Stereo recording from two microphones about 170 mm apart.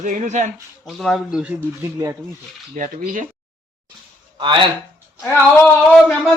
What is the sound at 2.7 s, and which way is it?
Speech, 50° right (ahead or behind).